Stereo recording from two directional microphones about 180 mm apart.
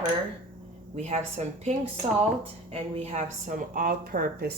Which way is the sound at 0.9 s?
40° right (ahead or behind).